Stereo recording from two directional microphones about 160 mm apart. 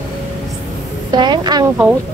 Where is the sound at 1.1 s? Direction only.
25° right (ahead or behind).